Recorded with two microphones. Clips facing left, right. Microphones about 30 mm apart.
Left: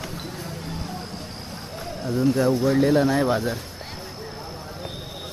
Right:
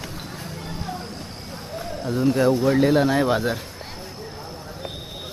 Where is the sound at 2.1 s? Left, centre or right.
Centre.